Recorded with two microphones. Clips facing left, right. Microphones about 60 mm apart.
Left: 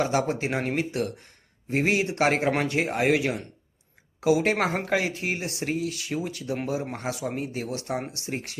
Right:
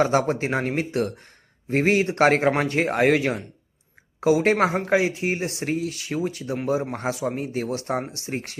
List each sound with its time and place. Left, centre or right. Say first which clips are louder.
0.0 s speech: right 4 dB; right
4.9 s speech: right 5 dB; right